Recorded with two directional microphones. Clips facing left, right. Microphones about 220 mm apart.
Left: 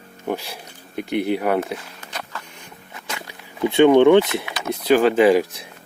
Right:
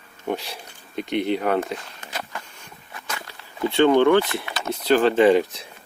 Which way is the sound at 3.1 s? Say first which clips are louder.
Left 2 dB; 15° left (ahead or behind).